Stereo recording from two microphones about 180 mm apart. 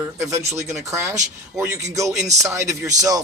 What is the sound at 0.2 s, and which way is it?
Speech, 15° right (ahead or behind).